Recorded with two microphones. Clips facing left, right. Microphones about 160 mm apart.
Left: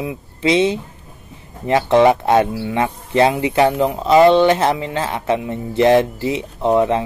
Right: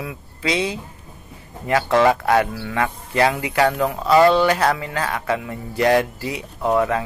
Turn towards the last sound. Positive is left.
turn(degrees=25)  # may be behind; listen again after turning